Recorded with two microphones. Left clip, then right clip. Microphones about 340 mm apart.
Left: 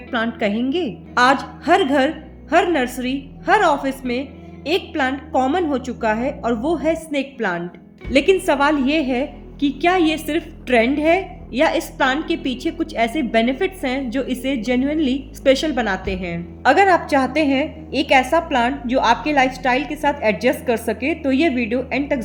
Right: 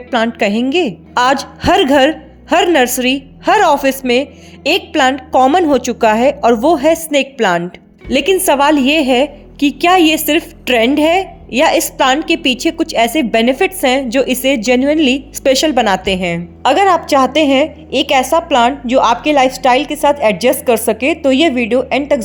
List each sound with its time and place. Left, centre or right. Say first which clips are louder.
0.1 s a woman's voice: right 7 dB; right